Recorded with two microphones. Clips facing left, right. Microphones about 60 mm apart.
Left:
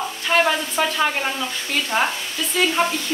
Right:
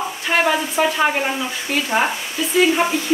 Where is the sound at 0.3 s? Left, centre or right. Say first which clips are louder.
Right 1 dB; centre.